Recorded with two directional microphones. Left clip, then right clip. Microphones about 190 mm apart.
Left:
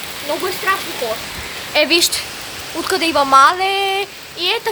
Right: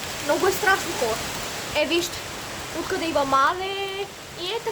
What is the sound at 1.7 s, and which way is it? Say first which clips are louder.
Speech: left 10 dB; 20° left (ahead or behind).